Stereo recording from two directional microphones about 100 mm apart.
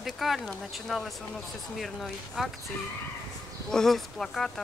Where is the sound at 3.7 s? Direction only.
5° left (ahead or behind).